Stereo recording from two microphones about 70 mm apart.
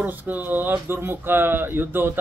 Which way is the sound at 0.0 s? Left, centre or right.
Right.